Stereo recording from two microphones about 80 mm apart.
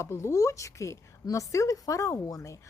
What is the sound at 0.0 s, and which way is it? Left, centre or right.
A woman's voice, left.